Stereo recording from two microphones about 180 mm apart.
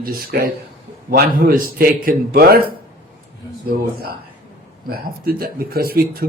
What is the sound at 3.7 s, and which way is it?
A man's voice, 55° right (ahead or behind).